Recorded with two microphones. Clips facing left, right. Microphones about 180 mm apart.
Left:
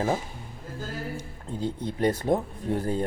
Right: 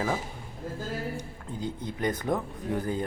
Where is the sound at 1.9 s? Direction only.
30° left (ahead or behind).